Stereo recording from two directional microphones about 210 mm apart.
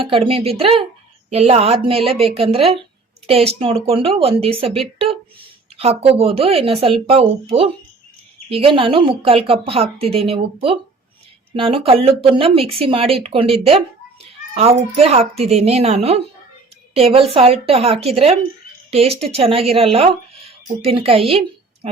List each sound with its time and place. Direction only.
0.0 s a child's voice: 25° right (ahead or behind)